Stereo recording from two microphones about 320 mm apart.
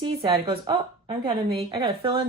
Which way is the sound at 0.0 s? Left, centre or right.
Centre.